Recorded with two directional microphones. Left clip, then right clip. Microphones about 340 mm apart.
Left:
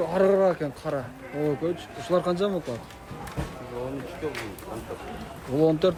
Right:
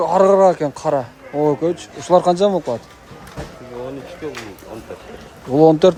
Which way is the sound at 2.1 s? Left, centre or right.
Centre.